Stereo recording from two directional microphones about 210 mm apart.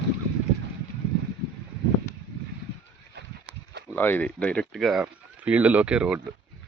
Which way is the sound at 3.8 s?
10° left (ahead or behind).